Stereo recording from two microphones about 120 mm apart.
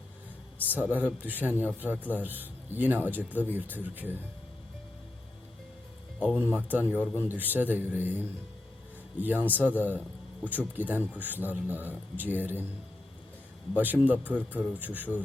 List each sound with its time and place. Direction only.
0.8 s a man's voice: 15° right (ahead or behind)
6.1 s a man's voice: 10° right (ahead or behind)
9.1 s a man's voice: 15° right (ahead or behind)
13.7 s a man's voice: 15° right (ahead or behind)